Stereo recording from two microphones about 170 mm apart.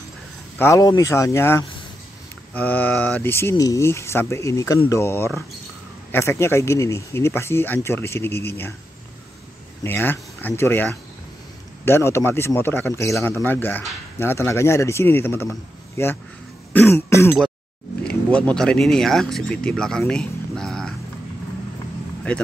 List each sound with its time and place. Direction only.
0.6 s speech: 20° left (ahead or behind)
9.8 s speech: 10° left (ahead or behind)
16.7 s cough: 15° left (ahead or behind)
18.0 s speech: 5° left (ahead or behind)